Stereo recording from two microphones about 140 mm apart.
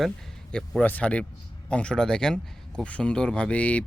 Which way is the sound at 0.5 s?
5° left (ahead or behind).